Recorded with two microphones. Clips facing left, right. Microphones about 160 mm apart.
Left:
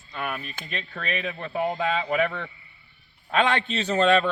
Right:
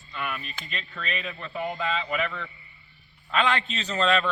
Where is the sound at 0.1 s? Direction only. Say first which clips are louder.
Left 2 dB; 40° left (ahead or behind).